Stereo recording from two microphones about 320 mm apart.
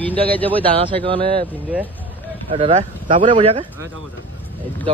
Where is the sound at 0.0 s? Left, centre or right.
Centre.